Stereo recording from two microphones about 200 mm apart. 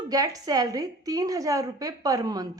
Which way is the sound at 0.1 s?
20° right (ahead or behind).